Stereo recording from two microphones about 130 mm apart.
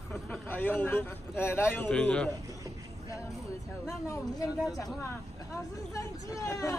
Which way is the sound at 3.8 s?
25° left (ahead or behind).